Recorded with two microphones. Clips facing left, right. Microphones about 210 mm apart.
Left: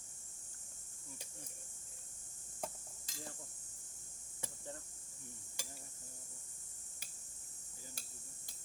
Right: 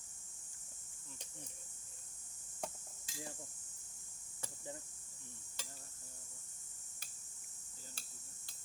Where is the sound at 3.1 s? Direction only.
10° right (ahead or behind).